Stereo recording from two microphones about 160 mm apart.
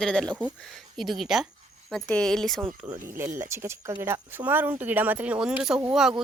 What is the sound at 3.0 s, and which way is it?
Speech, 15° right (ahead or behind).